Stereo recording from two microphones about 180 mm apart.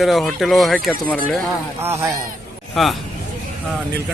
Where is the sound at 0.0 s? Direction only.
Centre (ahead or behind).